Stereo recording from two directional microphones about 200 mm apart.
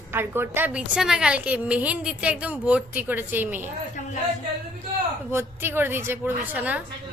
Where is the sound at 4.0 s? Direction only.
40° left (ahead or behind).